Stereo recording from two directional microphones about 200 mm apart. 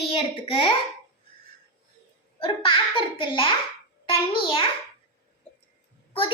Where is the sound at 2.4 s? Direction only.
25° left (ahead or behind).